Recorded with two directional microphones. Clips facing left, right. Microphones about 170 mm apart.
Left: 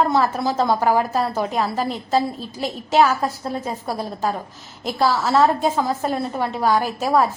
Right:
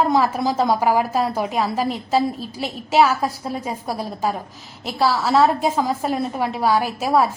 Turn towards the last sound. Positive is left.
turn(degrees=-10)  # may be behind; listen again after turning